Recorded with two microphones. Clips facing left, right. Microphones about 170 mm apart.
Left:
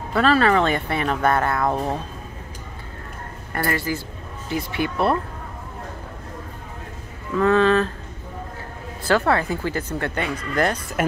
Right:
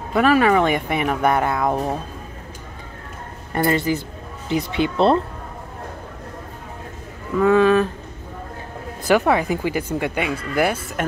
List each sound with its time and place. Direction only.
0.1 s speech: 15° right (ahead or behind)
3.5 s speech: 20° right (ahead or behind)
7.3 s speech: 10° right (ahead or behind)
9.0 s speech: 15° right (ahead or behind)